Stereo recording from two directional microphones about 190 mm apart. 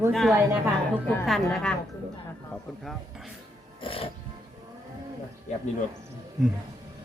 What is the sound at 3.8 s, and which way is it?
Music, 30° left (ahead or behind).